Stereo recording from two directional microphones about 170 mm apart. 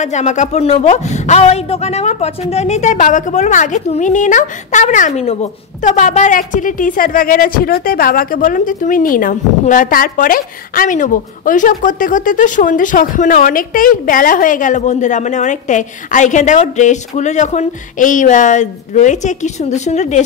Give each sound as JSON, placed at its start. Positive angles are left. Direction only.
{"t": 0.0, "sound": "speech", "side_deg": 45}